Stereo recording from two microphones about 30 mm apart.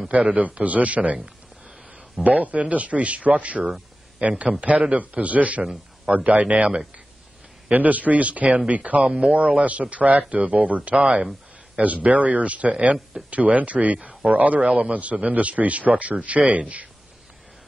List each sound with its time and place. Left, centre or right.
0.1 s speech: right
7.7 s speech: right
9.0 s speech: right
9.6 s speech: right
14.7 s speech: right